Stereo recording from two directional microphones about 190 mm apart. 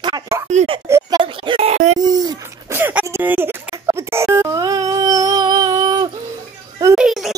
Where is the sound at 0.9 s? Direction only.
15° right (ahead or behind); by 2.0 s 35° right (ahead or behind).